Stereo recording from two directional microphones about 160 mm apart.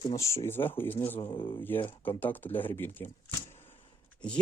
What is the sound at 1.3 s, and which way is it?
Speech, 30° left (ahead or behind).